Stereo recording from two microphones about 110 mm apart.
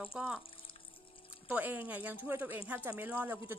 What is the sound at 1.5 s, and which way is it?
Speech, 15° right (ahead or behind).